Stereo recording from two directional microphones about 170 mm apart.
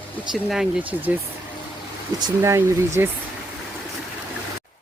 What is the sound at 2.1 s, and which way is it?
Speech, 20° right (ahead or behind).